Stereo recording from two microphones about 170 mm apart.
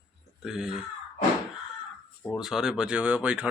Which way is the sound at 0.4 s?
5° right (ahead or behind).